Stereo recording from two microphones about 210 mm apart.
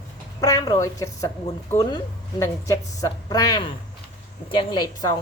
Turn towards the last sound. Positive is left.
turn(degrees=20)  # may be behind; listen again after turning